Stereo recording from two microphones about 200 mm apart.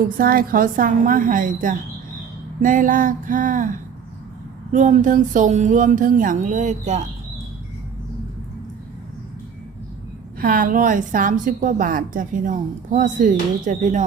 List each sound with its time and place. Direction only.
0.0 s a woman's voice: 45° right (ahead or behind)
10.4 s a woman's voice: 45° right (ahead or behind)